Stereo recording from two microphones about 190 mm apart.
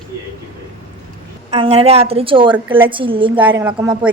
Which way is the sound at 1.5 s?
30° right (ahead or behind).